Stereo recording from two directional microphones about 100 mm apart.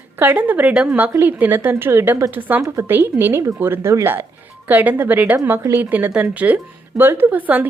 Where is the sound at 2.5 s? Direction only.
15° right (ahead or behind).